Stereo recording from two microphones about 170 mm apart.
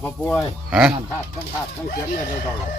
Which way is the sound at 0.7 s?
5° right (ahead or behind).